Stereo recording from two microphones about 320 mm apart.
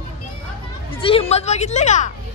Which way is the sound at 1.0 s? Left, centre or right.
Centre.